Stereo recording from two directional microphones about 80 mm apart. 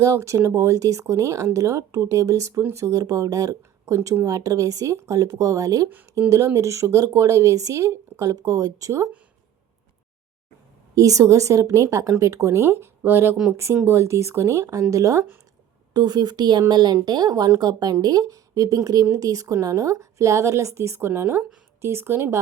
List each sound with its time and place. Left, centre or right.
0.0 s a woman's voice: right
10.9 s a woman's voice: right
15.9 s a woman's voice: right